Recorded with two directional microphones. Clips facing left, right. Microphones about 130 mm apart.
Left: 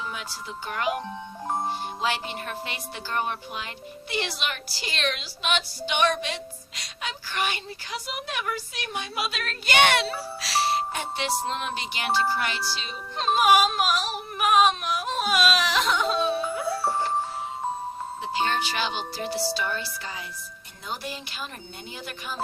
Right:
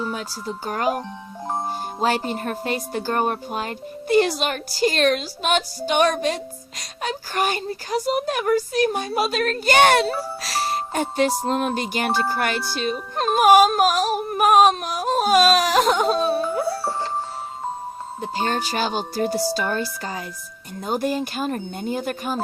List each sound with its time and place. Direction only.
0.0 s speech: 40° right (ahead or behind)
18.2 s speech: 40° right (ahead or behind)